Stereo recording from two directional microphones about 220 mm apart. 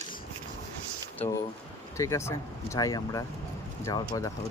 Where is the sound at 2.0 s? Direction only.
15° left (ahead or behind).